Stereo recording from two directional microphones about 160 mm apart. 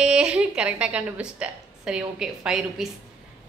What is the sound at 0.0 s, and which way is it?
A woman's voice, 5° right (ahead or behind).